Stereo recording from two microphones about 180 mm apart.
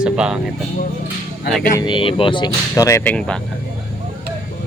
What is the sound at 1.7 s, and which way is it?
Speech, 25° left (ahead or behind).